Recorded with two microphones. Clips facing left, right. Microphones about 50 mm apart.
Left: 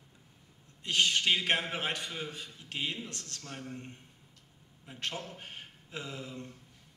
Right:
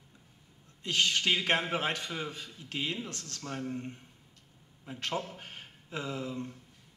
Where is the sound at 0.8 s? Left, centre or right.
Left.